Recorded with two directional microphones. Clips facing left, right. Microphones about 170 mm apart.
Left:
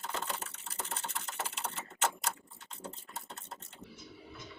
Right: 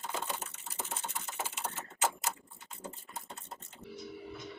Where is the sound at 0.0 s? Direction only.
5° right (ahead or behind).